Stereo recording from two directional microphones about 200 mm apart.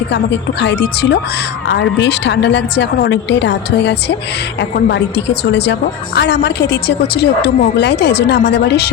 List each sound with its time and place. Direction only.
0.1 s a woman's voice: 60° left (ahead or behind)